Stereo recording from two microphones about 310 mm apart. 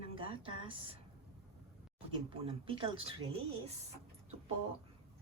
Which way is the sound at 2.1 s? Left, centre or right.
Centre.